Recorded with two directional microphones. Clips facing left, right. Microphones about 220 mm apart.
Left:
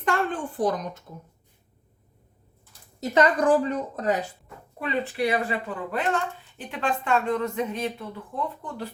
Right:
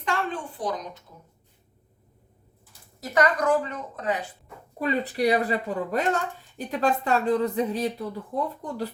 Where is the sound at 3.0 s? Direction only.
25° left (ahead or behind).